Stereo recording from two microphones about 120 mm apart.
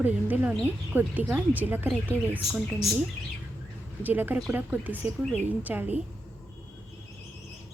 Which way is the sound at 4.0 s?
15° right (ahead or behind).